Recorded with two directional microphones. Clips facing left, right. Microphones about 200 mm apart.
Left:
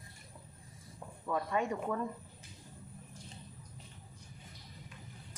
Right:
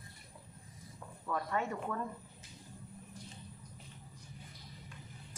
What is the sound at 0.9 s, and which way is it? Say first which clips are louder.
Speech: left 3 dB; 15° left (ahead or behind).